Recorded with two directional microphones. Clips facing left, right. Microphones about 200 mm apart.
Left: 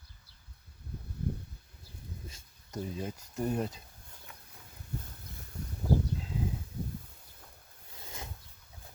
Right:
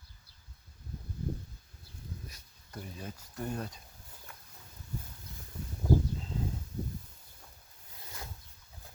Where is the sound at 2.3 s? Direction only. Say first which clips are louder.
Left 5 dB; 25° left (ahead or behind).